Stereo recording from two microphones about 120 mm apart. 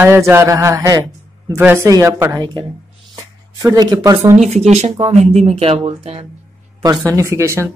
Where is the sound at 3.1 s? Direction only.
30° right (ahead or behind).